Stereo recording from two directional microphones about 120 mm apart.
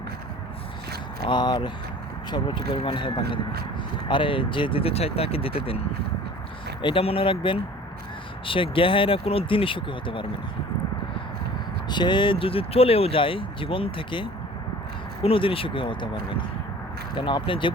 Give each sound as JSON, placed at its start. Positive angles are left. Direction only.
{"t": 1.3, "sound": "speech", "side_deg": 35}
{"t": 6.8, "sound": "speech", "side_deg": 50}
{"t": 11.9, "sound": "speech", "side_deg": 40}